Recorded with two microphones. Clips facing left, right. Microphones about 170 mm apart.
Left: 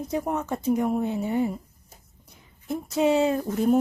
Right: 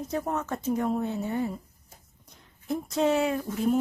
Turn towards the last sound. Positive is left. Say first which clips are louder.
# left 4 dB
turn(degrees=45)  # may be behind; listen again after turning